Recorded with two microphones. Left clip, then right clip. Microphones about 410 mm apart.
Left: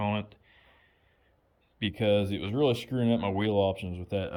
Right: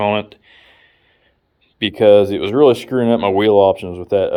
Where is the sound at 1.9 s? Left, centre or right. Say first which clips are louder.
Right 17 dB; centre.